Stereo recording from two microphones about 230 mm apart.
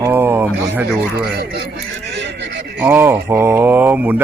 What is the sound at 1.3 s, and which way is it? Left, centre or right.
Speech, right.